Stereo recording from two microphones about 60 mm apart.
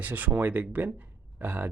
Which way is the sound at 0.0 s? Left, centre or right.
Right.